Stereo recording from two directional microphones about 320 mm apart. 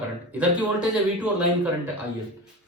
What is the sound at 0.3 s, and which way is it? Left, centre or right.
Speech, centre.